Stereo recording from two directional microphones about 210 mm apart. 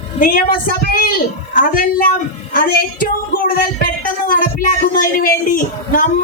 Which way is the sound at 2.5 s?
40° left (ahead or behind).